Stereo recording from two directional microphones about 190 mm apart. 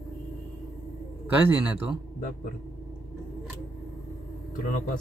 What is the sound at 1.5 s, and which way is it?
Speech, 5° right (ahead or behind).